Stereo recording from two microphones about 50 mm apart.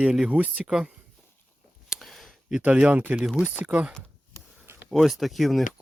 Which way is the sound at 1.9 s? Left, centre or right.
Centre.